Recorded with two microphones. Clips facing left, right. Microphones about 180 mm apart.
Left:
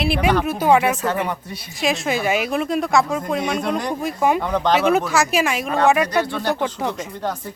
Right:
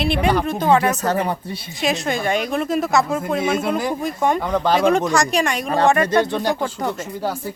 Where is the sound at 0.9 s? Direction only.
40° right (ahead or behind).